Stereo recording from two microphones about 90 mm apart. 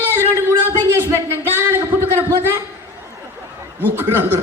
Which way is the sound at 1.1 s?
25° left (ahead or behind).